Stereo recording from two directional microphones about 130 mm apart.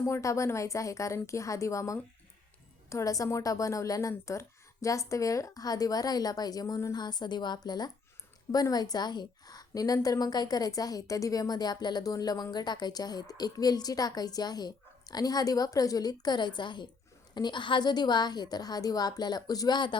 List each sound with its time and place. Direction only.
0.0 s a woman's voice: 25° left (ahead or behind)